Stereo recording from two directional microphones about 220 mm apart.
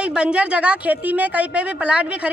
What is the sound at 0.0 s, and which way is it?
A woman's voice, 5° right (ahead or behind).